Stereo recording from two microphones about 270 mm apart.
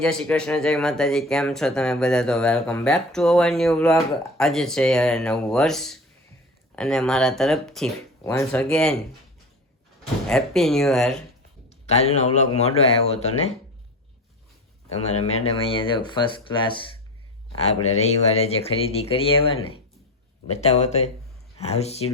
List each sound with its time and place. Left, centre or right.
0.0 s speech: centre
10.2 s speech: centre
11.7 s a man's voice: left
15.2 s speech: left